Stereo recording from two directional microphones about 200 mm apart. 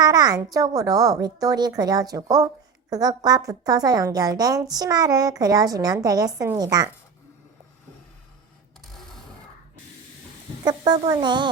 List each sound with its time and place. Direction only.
0.0 s a woman's voice: 20° right (ahead or behind)
10.6 s a woman's voice: 20° right (ahead or behind)